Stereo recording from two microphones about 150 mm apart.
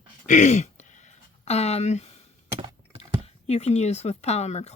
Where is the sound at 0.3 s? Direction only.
55° left (ahead or behind).